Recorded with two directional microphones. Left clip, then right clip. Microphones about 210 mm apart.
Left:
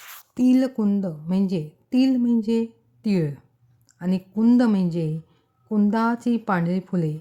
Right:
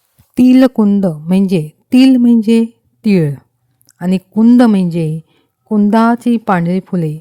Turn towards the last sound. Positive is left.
turn(degrees=-40)  # may be behind; listen again after turning